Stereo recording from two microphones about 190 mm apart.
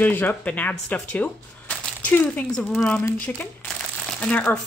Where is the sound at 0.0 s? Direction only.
10° left (ahead or behind).